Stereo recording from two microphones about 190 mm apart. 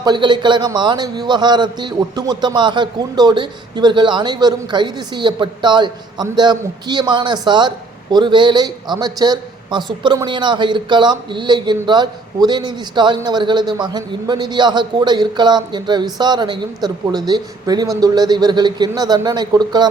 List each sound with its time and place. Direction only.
0.0 s a man's voice: 25° right (ahead or behind)